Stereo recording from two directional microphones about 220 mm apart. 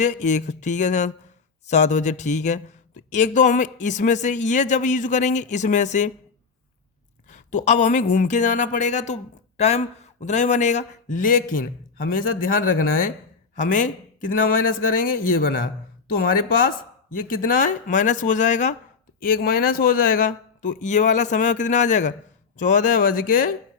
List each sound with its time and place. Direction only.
0.0 s speech: 35° left (ahead or behind)
7.3 s a woman's voice: 35° left (ahead or behind)